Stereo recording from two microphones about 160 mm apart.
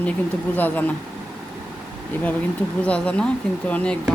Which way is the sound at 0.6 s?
10° left (ahead or behind).